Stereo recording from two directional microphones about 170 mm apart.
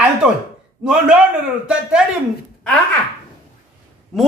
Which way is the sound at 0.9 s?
5° right (ahead or behind).